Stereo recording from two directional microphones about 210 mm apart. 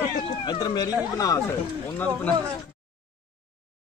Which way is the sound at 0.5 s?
20° left (ahead or behind).